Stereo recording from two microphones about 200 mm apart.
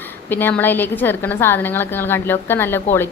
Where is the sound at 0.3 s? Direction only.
10° left (ahead or behind).